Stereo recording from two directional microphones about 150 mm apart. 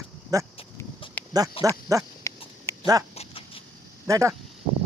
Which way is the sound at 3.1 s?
40° left (ahead or behind).